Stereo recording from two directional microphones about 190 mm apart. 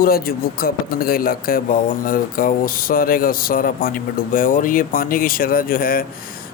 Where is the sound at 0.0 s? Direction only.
50° left (ahead or behind).